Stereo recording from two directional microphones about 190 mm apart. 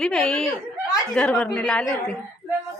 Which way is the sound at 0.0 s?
5° left (ahead or behind).